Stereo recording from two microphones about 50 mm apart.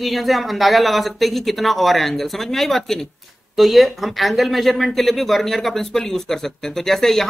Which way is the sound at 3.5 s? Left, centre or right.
Centre.